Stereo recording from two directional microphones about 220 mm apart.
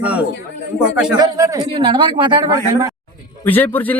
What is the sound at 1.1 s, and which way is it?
Speech, 15° right (ahead or behind).